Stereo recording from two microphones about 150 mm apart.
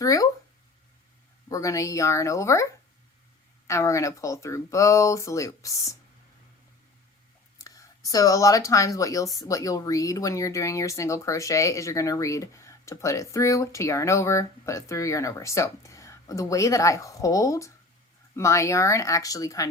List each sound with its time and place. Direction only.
0.0 s speech: 25° left (ahead or behind)
1.5 s speech: 20° left (ahead or behind)
3.7 s speech: 20° left (ahead or behind)
7.6 s speech: 25° left (ahead or behind)